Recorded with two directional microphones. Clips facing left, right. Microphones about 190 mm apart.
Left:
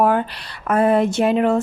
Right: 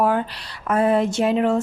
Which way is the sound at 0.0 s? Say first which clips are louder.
Left 3 dB; 60° left (ahead or behind).